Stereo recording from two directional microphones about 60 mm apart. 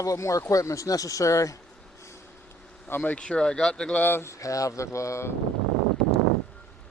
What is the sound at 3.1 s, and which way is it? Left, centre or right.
Speech, centre.